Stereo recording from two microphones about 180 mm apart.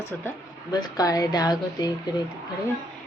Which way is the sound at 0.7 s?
20° left (ahead or behind).